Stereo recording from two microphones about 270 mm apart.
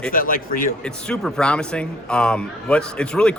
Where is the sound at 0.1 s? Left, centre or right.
Left.